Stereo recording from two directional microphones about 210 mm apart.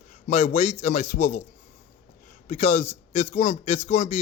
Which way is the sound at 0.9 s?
35° left (ahead or behind).